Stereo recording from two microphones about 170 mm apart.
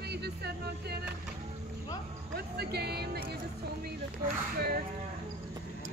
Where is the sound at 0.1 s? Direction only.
75° right (ahead or behind).